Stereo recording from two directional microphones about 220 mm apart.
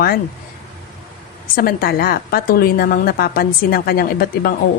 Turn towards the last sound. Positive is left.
turn(degrees=40)  # may be behind; listen again after turning